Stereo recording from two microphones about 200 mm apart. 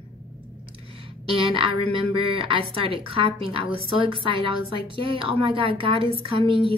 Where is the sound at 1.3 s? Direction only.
25° right (ahead or behind).